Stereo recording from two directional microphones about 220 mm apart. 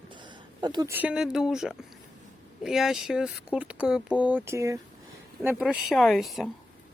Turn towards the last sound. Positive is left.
turn(degrees=0)  # may be behind; listen again after turning